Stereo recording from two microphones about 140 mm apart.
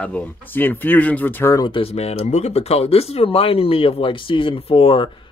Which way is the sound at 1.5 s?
35° left (ahead or behind).